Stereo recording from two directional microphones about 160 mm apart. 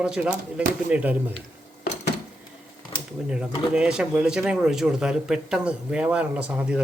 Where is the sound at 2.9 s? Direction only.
30° left (ahead or behind).